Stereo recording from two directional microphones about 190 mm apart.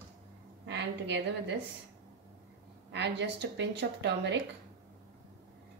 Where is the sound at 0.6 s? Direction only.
70° right (ahead or behind).